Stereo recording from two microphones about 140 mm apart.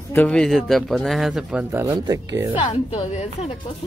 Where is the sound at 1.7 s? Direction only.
15° right (ahead or behind).